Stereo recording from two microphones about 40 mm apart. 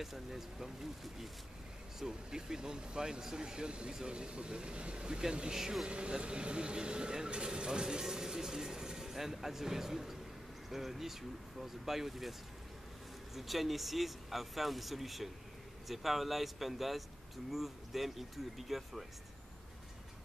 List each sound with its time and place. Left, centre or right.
0.0 s speech: centre
2.0 s speech: centre
5.9 s speech: right; by 19.0 s centre